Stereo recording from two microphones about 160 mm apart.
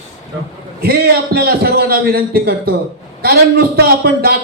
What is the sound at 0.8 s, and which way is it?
A man's voice, 75° right (ahead or behind).